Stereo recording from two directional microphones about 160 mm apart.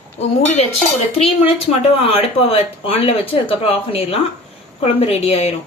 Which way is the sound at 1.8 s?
35° left (ahead or behind).